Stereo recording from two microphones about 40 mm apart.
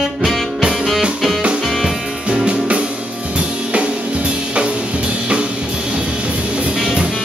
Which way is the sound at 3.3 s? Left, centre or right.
Right.